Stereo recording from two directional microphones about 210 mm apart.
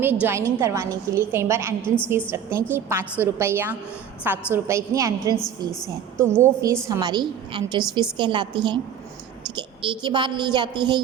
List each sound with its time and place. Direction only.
0.0 s a woman's voice: 10° right (ahead or behind)